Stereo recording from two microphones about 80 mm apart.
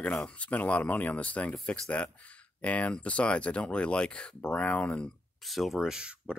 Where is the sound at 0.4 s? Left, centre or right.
Centre.